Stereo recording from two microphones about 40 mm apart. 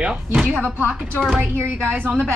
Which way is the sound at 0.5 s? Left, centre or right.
Right.